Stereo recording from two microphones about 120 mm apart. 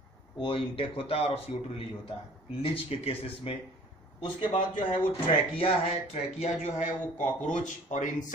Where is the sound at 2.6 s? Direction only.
50° left (ahead or behind); by 6.9 s 75° left (ahead or behind).